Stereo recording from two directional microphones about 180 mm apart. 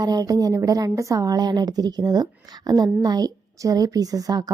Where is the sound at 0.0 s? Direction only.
20° right (ahead or behind).